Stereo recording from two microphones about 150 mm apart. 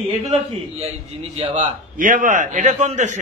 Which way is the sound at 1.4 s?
30° right (ahead or behind).